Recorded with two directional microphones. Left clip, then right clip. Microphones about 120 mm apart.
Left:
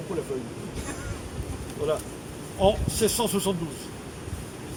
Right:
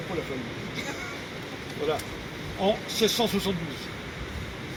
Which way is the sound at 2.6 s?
40° left (ahead or behind).